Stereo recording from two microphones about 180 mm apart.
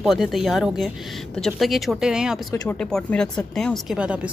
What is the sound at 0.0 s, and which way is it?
Speech, centre (ahead or behind).